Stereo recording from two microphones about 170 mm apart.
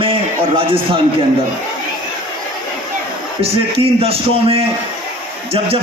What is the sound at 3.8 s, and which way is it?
A man's voice, 35° right (ahead or behind).